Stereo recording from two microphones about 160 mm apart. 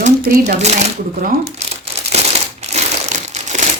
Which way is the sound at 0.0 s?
45° right (ahead or behind).